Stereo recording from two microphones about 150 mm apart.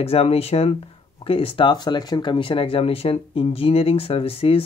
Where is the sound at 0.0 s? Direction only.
40° left (ahead or behind).